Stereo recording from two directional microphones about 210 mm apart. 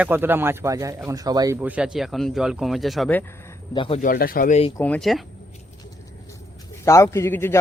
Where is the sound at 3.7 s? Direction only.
25° left (ahead or behind).